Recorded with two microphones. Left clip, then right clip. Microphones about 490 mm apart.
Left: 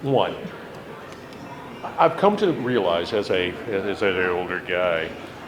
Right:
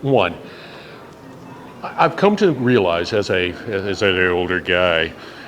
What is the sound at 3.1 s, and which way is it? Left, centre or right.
Speech, right.